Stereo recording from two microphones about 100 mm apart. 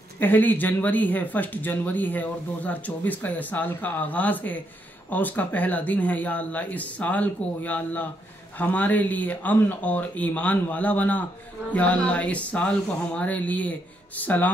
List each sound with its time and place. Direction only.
0.2 s speech: 20° left (ahead or behind)